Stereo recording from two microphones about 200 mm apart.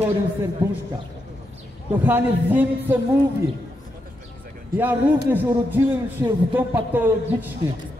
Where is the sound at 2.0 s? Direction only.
10° right (ahead or behind).